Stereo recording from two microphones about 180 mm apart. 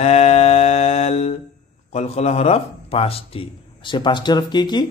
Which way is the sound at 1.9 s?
35° left (ahead or behind).